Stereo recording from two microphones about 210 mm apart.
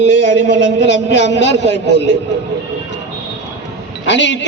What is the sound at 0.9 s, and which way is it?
A man's voice, 55° left (ahead or behind).